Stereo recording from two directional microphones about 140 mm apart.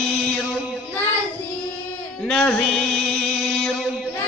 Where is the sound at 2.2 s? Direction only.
5° left (ahead or behind).